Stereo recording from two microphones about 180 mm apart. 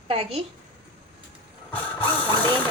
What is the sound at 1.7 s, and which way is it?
Ratchet, 10° left (ahead or behind).